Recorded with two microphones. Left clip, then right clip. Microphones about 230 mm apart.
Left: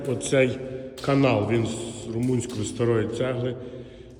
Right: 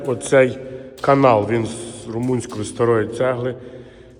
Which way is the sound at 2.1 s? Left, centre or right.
Right.